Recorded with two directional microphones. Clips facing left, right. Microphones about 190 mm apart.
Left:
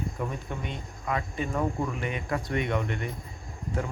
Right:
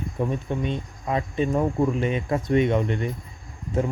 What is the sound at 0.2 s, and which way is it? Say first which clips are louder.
Speech: right 8 dB; 25° right (ahead or behind).